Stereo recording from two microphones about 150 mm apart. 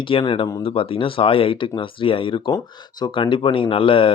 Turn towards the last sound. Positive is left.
turn(degrees=35)  # may be behind; listen again after turning